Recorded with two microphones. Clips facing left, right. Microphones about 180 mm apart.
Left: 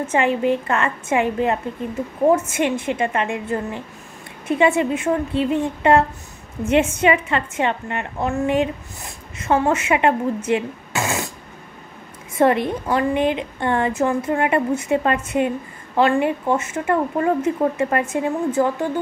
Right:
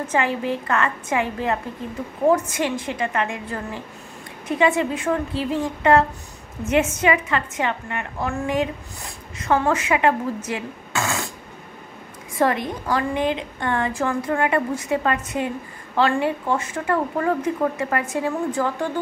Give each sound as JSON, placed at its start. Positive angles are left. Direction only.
{"t": 0.0, "sound": "a woman's voice", "side_deg": 25}
{"t": 12.4, "sound": "a woman's voice", "side_deg": 20}